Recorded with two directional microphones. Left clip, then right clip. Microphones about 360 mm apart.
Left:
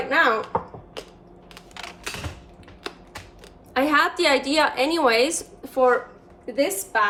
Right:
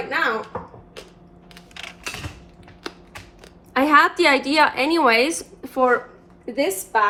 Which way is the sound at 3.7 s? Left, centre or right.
Centre.